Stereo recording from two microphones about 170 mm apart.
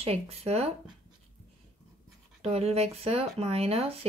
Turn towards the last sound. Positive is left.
turn(degrees=-35)  # may be behind; listen again after turning